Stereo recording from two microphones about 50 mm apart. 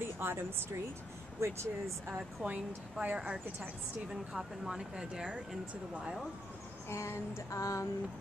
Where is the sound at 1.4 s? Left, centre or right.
Right.